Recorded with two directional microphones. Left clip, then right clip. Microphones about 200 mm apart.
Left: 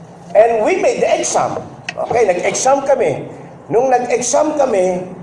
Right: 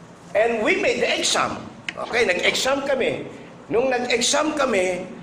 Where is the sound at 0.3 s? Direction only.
10° right (ahead or behind).